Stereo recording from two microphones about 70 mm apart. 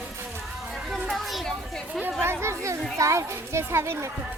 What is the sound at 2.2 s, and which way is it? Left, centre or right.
Chatter, right.